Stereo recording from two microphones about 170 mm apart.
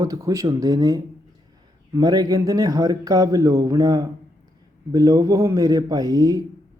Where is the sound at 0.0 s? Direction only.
20° right (ahead or behind).